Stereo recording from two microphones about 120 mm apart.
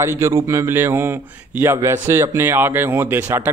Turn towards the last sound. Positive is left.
turn(degrees=-15)  # may be behind; listen again after turning